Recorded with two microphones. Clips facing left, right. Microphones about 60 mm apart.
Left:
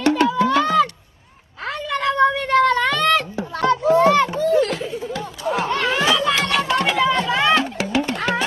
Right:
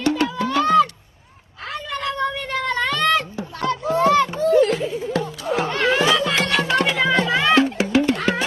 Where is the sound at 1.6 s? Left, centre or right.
Left.